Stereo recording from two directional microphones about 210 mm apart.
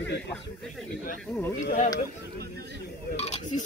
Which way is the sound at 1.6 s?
35° left (ahead or behind).